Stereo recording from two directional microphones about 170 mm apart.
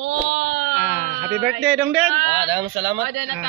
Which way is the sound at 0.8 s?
5° right (ahead or behind).